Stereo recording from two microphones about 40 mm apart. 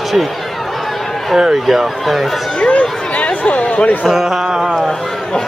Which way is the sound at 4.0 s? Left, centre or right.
Centre.